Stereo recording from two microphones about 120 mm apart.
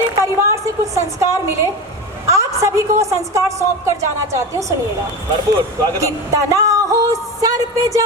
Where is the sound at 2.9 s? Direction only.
25° right (ahead or behind).